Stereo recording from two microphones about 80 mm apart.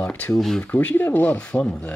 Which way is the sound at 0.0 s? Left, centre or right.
Left.